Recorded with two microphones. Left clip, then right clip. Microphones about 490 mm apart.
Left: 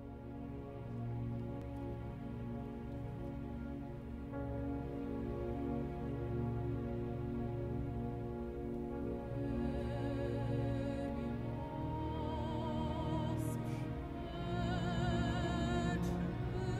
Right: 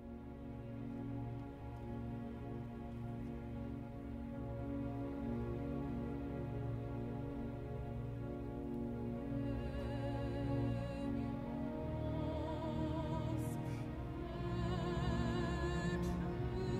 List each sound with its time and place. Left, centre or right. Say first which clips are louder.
14.8 s music: left 2 dB; centre
15.6 s music: left 3 dB; left